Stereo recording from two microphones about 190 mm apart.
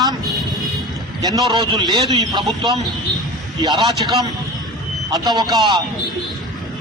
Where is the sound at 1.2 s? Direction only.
25° right (ahead or behind).